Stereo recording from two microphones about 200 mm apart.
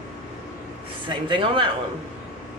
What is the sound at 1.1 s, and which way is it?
Speech, 25° right (ahead or behind).